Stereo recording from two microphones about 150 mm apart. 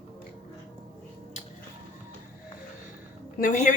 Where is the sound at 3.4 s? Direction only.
60° left (ahead or behind).